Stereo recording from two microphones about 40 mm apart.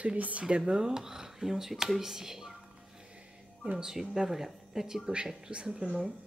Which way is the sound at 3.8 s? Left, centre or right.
Centre.